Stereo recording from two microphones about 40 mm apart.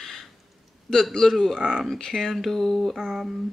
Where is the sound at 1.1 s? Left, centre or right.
Centre.